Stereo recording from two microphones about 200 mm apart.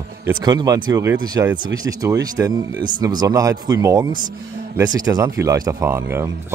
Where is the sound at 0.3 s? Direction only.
20° right (ahead or behind).